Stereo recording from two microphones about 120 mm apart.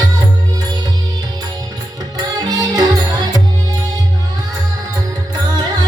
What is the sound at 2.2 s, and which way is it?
Music, 35° right (ahead or behind).